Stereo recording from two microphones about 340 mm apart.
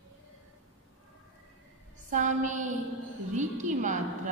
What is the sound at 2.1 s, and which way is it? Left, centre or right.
A woman's voice, right.